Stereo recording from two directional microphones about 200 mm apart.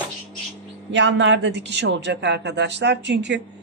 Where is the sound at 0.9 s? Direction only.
60° right (ahead or behind).